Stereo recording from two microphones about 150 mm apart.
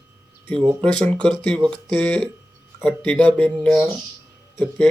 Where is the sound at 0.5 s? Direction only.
35° right (ahead or behind).